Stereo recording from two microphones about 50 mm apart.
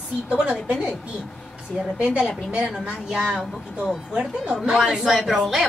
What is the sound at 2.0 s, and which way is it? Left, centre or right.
A woman's voice, centre.